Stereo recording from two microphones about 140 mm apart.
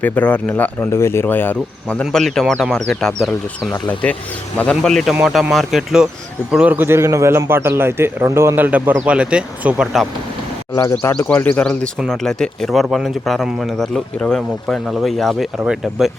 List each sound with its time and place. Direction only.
0.0 s a man's voice: 10° left (ahead or behind)
11.1 s speech: 10° left (ahead or behind)